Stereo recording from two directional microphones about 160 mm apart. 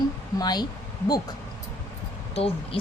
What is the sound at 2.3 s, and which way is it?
Speech, 40° left (ahead or behind).